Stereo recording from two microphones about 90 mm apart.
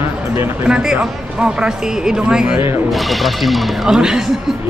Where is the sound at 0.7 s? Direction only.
10° right (ahead or behind).